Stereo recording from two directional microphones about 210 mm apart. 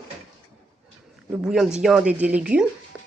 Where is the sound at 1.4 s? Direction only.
5° right (ahead or behind).